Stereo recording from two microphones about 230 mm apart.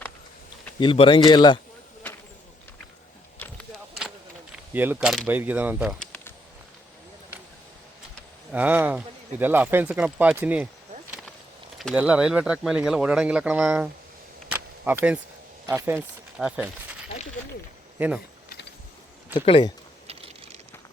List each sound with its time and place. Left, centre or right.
0.8 s speech: left
3.3 s a sound: centre
4.5 s speech: centre
8.5 s speech: centre
11.8 s speech: centre
14.5 s a sound: centre
15.6 s speech: centre
18.0 s speech: centre
19.3 s speech: left